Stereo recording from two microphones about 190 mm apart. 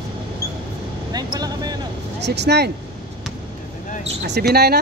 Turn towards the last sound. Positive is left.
turn(degrees=-55)  # may be behind; listen again after turning